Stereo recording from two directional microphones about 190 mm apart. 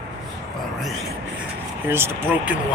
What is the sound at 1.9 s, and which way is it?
Speech, 10° right (ahead or behind).